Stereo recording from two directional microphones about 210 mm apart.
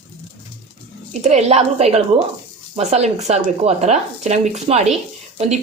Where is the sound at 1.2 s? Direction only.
30° right (ahead or behind).